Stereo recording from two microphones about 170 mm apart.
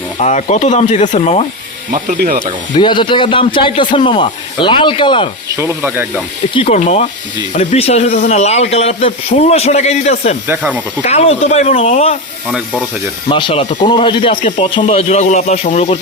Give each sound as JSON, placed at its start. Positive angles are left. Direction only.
{"t": 0.2, "sound": "speech", "side_deg": 45}
{"t": 1.9, "sound": "speech", "side_deg": -55}
{"t": 2.7, "sound": "a man's voice", "side_deg": 30}
{"t": 5.5, "sound": "rub", "side_deg": -15}
{"t": 6.5, "sound": "a man's voice", "side_deg": 35}
{"t": 10.4, "sound": "rub", "side_deg": -10}
{"t": 11.0, "sound": "a man's voice", "side_deg": 40}
{"t": 12.5, "sound": "speech", "side_deg": 5}
{"t": 13.2, "sound": "a man's voice", "side_deg": 30}
{"t": 14.4, "sound": "speech", "side_deg": 40}